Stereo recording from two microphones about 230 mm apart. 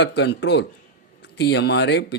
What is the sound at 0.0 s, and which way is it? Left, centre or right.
A man's voice, left.